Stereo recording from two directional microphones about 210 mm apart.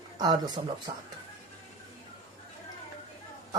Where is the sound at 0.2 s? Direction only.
20° right (ahead or behind).